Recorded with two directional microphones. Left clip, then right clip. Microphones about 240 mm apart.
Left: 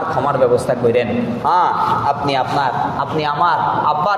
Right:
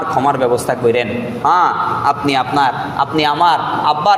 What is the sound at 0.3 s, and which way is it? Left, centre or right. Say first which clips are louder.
A man's voice: left 2 dB; right.